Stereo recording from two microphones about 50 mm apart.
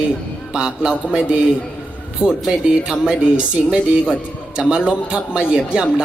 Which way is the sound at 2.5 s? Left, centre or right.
Centre.